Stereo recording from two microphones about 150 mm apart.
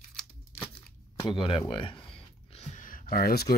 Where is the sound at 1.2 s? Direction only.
35° left (ahead or behind).